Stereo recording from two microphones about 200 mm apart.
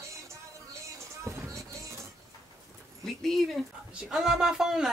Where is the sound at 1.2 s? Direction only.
15° right (ahead or behind).